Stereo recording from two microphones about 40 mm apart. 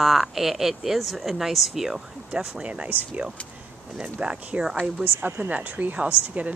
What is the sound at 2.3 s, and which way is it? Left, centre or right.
Speech, right.